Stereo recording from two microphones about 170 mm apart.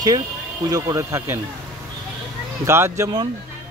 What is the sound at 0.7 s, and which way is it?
Speech, 20° right (ahead or behind).